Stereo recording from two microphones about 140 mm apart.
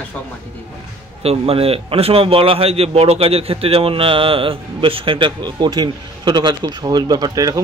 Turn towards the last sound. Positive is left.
turn(degrees=-25)  # may be behind; listen again after turning